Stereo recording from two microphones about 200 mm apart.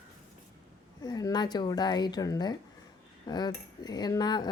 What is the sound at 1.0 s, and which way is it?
Speech, 20° left (ahead or behind).